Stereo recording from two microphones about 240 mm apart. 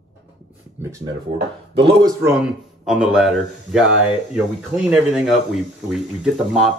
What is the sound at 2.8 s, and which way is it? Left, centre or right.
Speech, centre.